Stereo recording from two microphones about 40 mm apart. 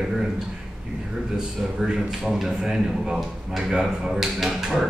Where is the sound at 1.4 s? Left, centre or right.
Centre.